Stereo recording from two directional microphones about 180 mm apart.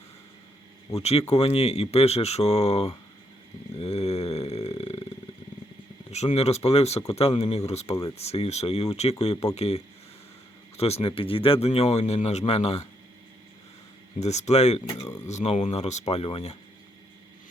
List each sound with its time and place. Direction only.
0.9 s speech: 35° left (ahead or behind)
3.8 s a sound: 35° left (ahead or behind)
6.1 s speech: 40° left (ahead or behind)
14.2 s speech: 40° left (ahead or behind)
15.0 s speech: 20° left (ahead or behind)
15.3 s speech: 40° left (ahead or behind)